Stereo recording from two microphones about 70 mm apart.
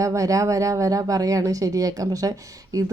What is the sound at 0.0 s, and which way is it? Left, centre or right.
A woman's voice, right.